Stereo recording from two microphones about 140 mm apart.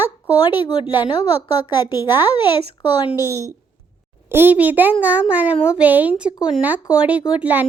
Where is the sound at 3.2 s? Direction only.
20° right (ahead or behind).